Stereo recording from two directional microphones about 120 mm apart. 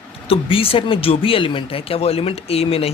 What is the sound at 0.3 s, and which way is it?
Speech, 50° left (ahead or behind).